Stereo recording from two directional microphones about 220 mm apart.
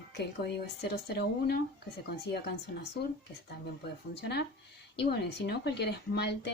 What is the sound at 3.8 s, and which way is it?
Speech, 50° left (ahead or behind).